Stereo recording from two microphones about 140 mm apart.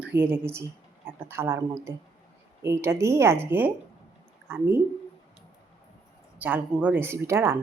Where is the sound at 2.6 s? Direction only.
20° right (ahead or behind).